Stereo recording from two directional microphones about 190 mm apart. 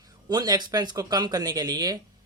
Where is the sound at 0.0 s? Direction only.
20° right (ahead or behind).